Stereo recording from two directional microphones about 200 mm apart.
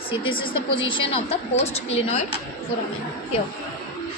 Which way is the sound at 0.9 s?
25° left (ahead or behind).